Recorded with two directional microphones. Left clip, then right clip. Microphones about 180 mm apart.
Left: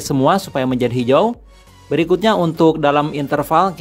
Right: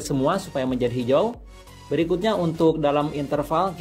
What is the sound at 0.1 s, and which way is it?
A man's voice, 35° left (ahead or behind).